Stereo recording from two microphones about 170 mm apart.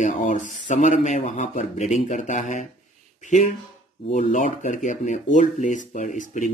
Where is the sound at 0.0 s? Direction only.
45° left (ahead or behind).